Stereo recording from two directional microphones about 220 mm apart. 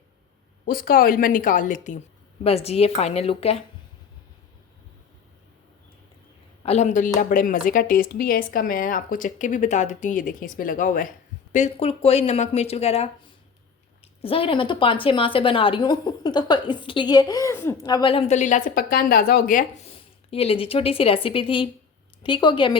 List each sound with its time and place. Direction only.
0.6 s a woman's voice: 40° left (ahead or behind)
6.6 s a woman's voice: 30° left (ahead or behind)